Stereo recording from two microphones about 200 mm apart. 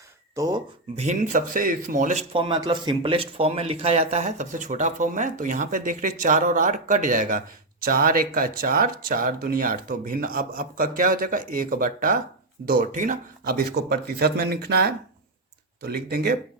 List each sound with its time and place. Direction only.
0.3 s speech: 20° right (ahead or behind)
0.9 s speech: 40° right (ahead or behind)
2.3 s speech: 25° right (ahead or behind); by 16.3 s 50° right (ahead or behind)